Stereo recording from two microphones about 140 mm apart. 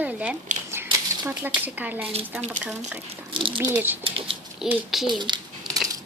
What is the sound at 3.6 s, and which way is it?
Speech, 15° right (ahead or behind).